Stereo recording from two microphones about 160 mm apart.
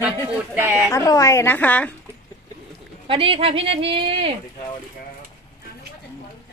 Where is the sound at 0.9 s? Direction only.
20° left (ahead or behind).